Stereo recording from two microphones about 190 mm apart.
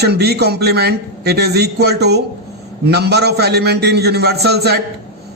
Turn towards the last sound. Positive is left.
turn(degrees=-60)  # may be behind; listen again after turning